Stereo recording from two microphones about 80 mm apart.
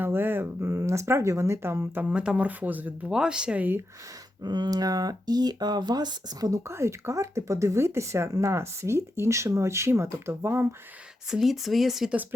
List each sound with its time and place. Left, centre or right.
0.0 s speech: right
2.0 s speech: centre
3.1 s speech: centre
4.4 s speech: right
6.7 s speech: right
11.3 s speech: centre